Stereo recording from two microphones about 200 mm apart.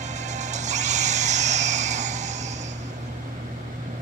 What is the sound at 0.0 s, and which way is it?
Vehicle, 35° right (ahead or behind).